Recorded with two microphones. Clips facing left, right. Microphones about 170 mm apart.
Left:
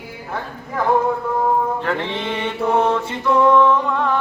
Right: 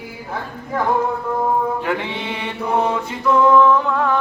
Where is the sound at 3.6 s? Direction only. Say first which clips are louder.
Right 1 dB; centre (ahead or behind).